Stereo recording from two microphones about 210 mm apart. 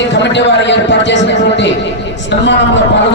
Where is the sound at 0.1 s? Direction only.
55° left (ahead or behind).